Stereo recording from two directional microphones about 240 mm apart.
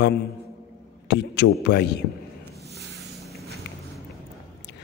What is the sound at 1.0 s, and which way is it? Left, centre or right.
Speech, left.